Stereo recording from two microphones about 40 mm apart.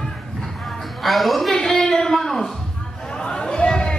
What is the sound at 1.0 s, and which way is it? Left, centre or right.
Speech, centre.